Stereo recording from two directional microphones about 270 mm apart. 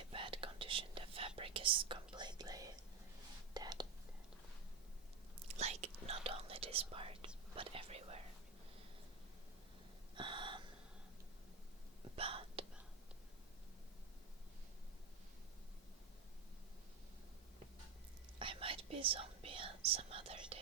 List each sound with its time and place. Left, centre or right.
0.1 s whispering: centre
1.4 s speech: centre
3.5 s whispering: centre
5.5 s whispering: right
10.2 s gasp: centre
12.1 s whispering: right
18.3 s whispering: centre